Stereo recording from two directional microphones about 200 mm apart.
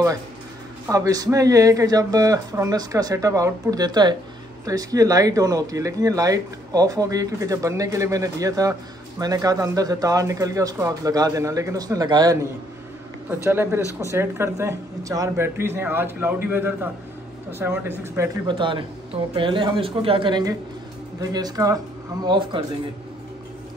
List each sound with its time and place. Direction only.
0.8 s speech: 15° right (ahead or behind)
13.5 s speech: 10° right (ahead or behind)
18.6 s speech: 25° right (ahead or behind)